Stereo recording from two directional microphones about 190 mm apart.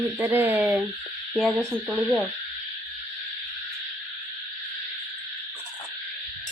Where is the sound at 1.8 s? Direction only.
5° right (ahead or behind).